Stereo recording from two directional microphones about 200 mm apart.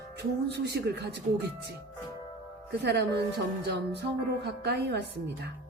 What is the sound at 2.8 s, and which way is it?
Speech, 55° right (ahead or behind).